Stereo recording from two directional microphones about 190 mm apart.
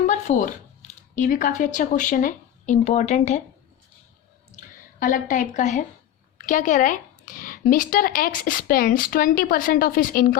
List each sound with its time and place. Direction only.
0.0 s a sound: 40° left (ahead or behind)
1.1 s speech: 45° left (ahead or behind)
4.9 s speech: 45° left (ahead or behind)